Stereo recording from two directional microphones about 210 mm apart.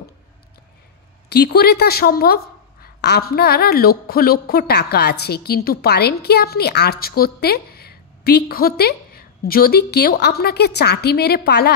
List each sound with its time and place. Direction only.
1.3 s a woman's voice: 50° left (ahead or behind)